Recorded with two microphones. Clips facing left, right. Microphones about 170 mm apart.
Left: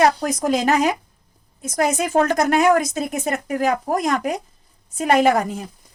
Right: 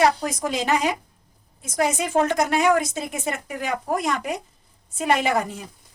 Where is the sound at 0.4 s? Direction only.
45° left (ahead or behind).